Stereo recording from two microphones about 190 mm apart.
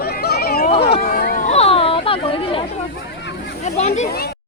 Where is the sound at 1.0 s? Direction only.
55° left (ahead or behind).